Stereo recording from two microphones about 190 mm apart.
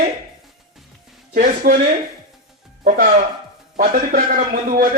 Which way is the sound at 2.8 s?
45° right (ahead or behind).